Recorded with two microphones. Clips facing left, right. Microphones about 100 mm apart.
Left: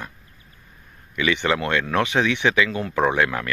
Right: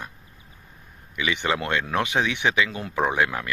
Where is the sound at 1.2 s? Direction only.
15° right (ahead or behind).